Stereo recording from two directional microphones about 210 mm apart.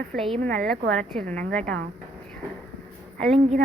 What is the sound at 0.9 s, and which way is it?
Speech, 5° left (ahead or behind).